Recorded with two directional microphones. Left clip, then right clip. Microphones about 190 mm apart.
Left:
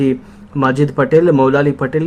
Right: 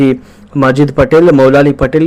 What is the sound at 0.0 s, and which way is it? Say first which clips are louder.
A man's voice: right 5 dB; 20° right (ahead or behind).